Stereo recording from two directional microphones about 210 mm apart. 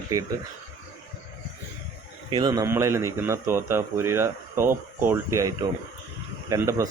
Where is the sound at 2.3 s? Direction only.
20° right (ahead or behind).